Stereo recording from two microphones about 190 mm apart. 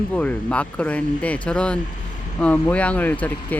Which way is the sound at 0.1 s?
10° left (ahead or behind).